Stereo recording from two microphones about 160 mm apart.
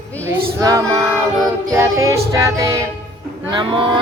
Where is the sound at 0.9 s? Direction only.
15° right (ahead or behind).